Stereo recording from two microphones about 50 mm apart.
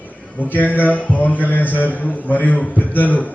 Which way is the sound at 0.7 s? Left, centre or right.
Left.